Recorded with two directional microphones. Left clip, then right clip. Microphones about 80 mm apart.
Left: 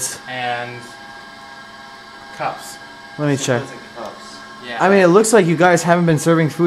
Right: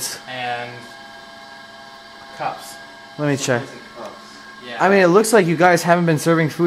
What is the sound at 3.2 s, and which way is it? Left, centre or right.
Speech, centre.